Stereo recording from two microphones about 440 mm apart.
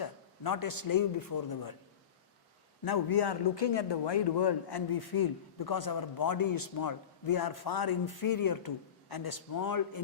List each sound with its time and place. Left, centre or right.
0.0 s a man's voice: left
2.8 s a man's voice: left